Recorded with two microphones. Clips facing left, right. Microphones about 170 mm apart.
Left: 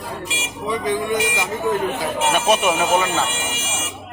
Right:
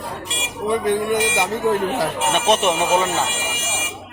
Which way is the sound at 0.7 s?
60° right (ahead or behind).